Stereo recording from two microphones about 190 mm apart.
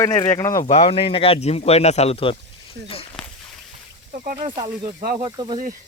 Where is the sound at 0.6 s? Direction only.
35° left (ahead or behind).